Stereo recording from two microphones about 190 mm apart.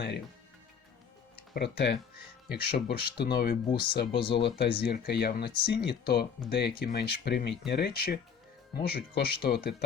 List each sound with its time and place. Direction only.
1.5 s speech: 60° left (ahead or behind)
4.1 s speech: 25° left (ahead or behind)
4.4 s speech: 60° left (ahead or behind)